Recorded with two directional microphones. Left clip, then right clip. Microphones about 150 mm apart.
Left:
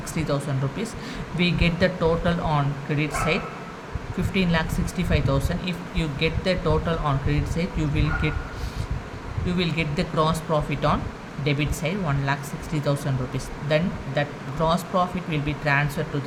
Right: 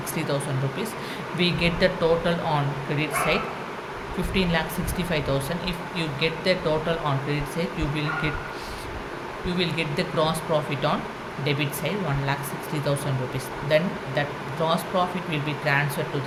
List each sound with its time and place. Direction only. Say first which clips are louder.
1.4 s speech: right 1 dB; 35° left (ahead or behind)
9.5 s speech: even; 40° left (ahead or behind)
13.7 s speech: right 2 dB; 35° left (ahead or behind)